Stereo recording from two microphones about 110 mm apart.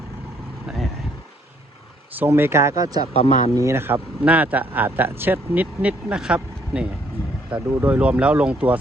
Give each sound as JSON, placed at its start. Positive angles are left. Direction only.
{"t": 2.1, "sound": "speech", "side_deg": -20}
{"t": 3.1, "sound": "speech", "side_deg": 75}
{"t": 3.5, "sound": "speech", "side_deg": -25}